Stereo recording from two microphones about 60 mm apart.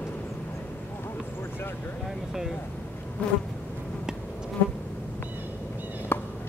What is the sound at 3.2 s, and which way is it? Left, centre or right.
Bee, left.